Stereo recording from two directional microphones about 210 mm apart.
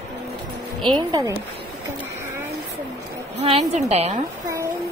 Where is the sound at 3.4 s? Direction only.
25° right (ahead or behind).